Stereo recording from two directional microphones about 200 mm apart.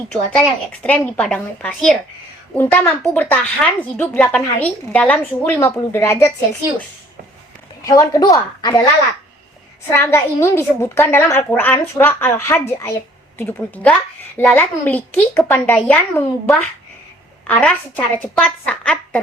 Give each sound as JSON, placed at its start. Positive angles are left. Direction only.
{"t": 0.1, "sound": "a woman's voice", "side_deg": 5}
{"t": 7.8, "sound": "a woman's voice", "side_deg": 15}
{"t": 9.9, "sound": "a woman's voice", "side_deg": 10}